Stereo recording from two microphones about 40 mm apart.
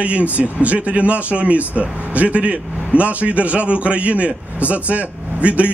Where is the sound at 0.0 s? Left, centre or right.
Right.